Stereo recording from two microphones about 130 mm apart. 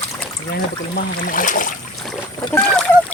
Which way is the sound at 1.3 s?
90° left.